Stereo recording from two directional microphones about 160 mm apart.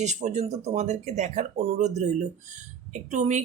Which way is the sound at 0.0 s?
45° right (ahead or behind).